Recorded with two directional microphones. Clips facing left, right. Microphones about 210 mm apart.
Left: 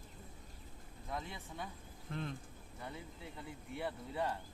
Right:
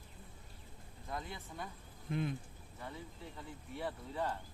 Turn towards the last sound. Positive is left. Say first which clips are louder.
# even
turn(degrees=10)  # may be behind; listen again after turning